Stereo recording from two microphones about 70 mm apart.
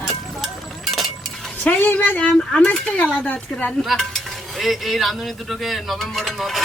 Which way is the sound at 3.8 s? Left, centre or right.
Centre.